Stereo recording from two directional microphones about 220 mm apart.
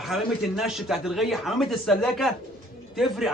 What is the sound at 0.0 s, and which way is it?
A man's voice, centre (ahead or behind).